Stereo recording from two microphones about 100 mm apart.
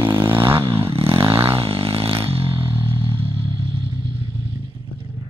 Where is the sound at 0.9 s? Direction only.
65° right (ahead or behind).